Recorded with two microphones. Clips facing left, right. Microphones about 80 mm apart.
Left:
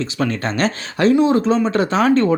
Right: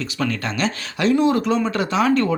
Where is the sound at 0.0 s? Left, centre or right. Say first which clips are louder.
Left 3 dB; left.